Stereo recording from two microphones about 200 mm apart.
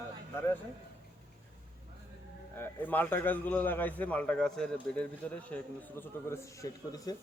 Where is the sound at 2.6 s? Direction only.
10° left (ahead or behind).